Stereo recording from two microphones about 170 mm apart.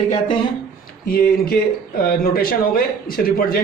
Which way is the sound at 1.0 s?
60° left (ahead or behind).